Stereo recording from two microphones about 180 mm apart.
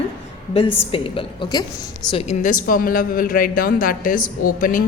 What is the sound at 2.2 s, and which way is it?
Speech, 45° left (ahead or behind).